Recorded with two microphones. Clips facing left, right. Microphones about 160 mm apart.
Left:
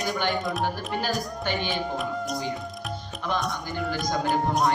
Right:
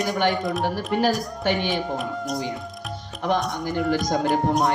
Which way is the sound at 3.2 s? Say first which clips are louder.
Right 6 dB; 75° right (ahead or behind).